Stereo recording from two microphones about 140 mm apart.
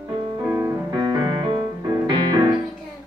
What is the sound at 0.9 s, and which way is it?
Music, 30° right (ahead or behind).